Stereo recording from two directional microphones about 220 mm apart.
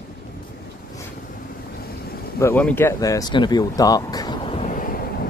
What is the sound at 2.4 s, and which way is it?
Speech, 10° left (ahead or behind).